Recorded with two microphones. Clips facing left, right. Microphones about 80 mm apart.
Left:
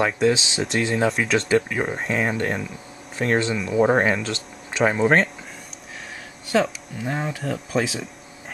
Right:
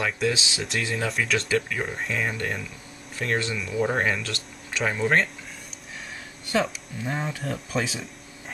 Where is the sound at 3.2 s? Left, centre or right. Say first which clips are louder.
Left 6 dB; left.